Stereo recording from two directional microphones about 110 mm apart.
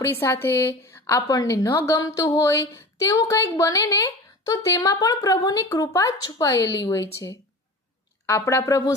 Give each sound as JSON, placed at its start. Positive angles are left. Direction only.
{"t": 0.0, "sound": "a woman's voice", "side_deg": 25}